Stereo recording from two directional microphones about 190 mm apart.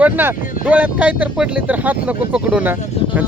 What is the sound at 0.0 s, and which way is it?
Speech, 10° right (ahead or behind).